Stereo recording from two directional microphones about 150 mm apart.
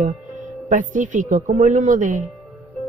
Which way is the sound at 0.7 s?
60° right (ahead or behind).